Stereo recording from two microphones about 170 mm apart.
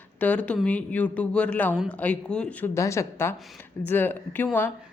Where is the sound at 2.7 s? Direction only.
15° left (ahead or behind).